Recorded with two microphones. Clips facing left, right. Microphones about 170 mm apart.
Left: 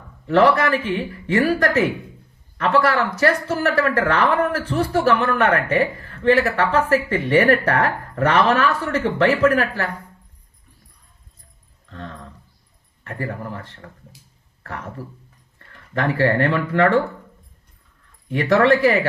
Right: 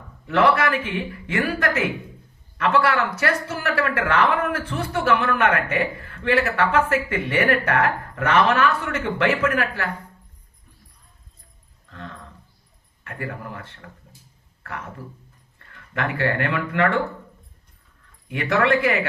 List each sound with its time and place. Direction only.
0.3 s speech: 35° left (ahead or behind)
13.1 s speech: 35° left (ahead or behind)
14.6 s speech: 35° left (ahead or behind)
18.3 s speech: 35° left (ahead or behind)